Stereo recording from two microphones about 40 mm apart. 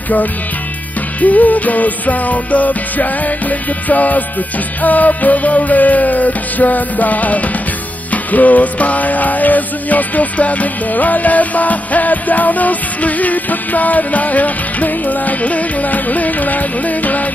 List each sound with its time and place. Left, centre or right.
1.2 s music: left